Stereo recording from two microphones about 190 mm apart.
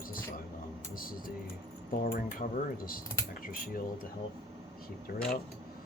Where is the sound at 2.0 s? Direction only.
50° left (ahead or behind).